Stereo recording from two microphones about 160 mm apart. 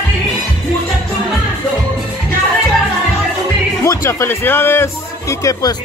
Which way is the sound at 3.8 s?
20° left (ahead or behind).